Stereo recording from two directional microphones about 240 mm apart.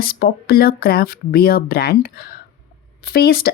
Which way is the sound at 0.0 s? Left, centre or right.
Left.